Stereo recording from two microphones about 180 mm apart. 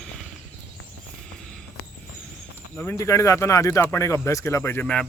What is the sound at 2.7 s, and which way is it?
Speech, 15° left (ahead or behind).